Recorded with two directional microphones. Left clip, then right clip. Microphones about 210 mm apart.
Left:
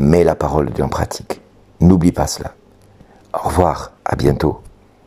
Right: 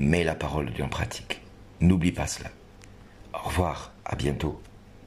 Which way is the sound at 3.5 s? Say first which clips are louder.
Left 13 dB; 35° left (ahead or behind).